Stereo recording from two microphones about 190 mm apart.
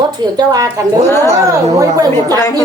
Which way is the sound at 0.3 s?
20° right (ahead or behind).